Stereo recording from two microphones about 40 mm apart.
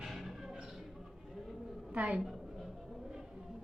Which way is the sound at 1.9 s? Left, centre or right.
Right.